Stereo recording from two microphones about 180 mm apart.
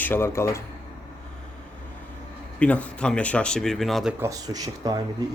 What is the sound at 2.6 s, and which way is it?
A man's voice, 5° left (ahead or behind).